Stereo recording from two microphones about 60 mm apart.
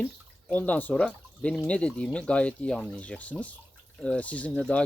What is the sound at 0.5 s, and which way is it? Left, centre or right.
Speech, left.